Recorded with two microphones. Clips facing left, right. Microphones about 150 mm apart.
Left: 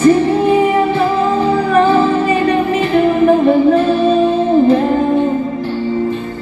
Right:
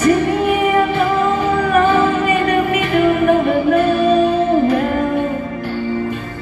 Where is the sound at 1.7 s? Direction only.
30° left (ahead or behind).